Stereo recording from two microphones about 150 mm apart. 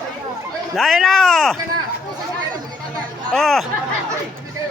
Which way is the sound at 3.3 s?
Centre (ahead or behind).